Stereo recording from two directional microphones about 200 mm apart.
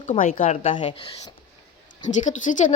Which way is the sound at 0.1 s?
40° left (ahead or behind).